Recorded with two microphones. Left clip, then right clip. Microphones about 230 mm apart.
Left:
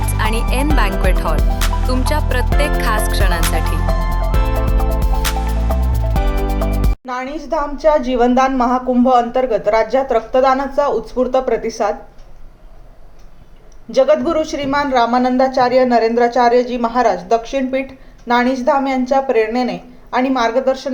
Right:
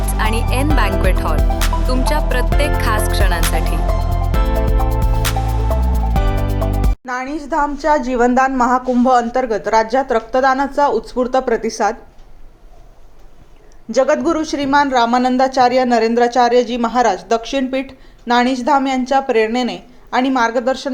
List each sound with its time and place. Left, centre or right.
0.1 s speech: centre
4.3 s music: centre
7.3 s a woman's voice: right
13.9 s speech: right